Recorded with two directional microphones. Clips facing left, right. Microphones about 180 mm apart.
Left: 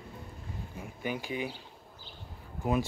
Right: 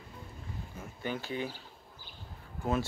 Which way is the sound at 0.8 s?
10° left (ahead or behind).